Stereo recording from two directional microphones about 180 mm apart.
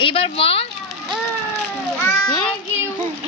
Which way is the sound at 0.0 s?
30° left (ahead or behind).